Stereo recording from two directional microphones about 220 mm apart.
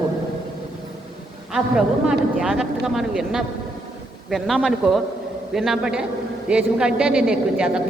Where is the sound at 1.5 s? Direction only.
Centre (ahead or behind).